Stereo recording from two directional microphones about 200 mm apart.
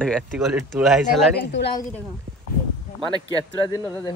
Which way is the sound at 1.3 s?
60° left (ahead or behind).